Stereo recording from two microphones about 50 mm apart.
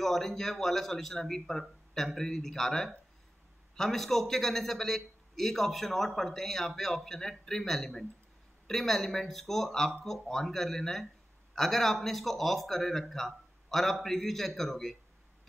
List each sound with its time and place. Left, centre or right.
0.0 s a man's voice: centre